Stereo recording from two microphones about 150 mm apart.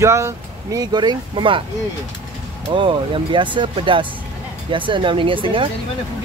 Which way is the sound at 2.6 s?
35° right (ahead or behind).